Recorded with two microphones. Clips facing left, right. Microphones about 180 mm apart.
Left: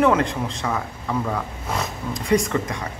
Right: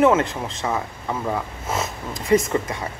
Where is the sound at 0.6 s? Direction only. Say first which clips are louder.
Right 1 dB; 20° right (ahead or behind).